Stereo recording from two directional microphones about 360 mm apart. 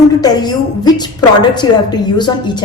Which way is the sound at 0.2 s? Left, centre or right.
Centre.